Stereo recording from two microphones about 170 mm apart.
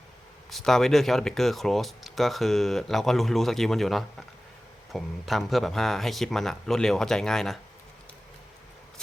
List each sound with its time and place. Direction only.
0.5 s speech: centre (ahead or behind)